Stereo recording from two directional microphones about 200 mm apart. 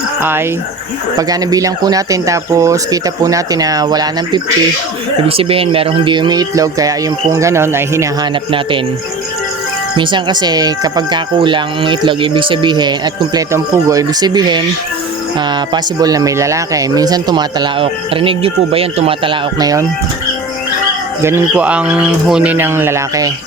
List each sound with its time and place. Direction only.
0.2 s speech: 10° right (ahead or behind)
10.0 s speech: 25° right (ahead or behind)
21.2 s speech: 10° right (ahead or behind)